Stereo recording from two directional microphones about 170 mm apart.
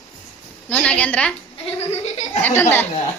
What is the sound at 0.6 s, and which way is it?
Speech, 5° left (ahead or behind).